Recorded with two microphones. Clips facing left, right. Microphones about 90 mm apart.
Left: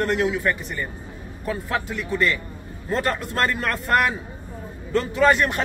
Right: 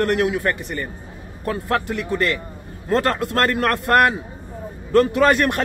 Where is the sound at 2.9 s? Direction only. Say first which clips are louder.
Right 5 dB; 80° right.